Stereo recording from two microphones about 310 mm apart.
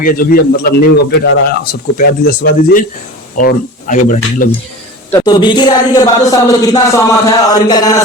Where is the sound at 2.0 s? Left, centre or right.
Left.